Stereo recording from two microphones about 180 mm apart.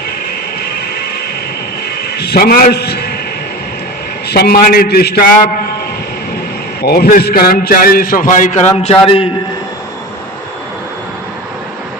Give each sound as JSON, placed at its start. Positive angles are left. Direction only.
{"t": 2.1, "sound": "a man's voice", "side_deg": 60}
{"t": 4.3, "sound": "a man's voice", "side_deg": 60}
{"t": 6.8, "sound": "a man's voice", "side_deg": 60}
{"t": 8.8, "sound": "a man's voice", "side_deg": 35}